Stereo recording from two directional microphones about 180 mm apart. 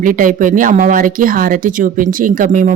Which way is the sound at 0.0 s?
50° right (ahead or behind).